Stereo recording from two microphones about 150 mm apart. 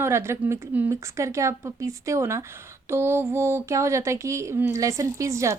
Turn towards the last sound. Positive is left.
turn(degrees=-20)  # may be behind; listen again after turning